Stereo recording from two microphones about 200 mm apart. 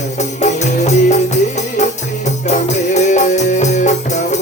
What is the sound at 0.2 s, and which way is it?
Music, 35° left (ahead or behind).